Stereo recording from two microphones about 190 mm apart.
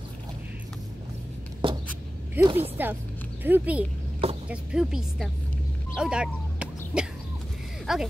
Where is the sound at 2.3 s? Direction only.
15° right (ahead or behind).